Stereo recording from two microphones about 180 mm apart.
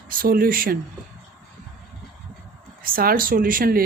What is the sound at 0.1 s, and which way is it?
Speech, 55° right (ahead or behind).